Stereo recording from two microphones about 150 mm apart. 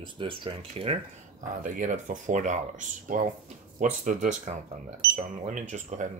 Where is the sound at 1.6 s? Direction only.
60° right (ahead or behind).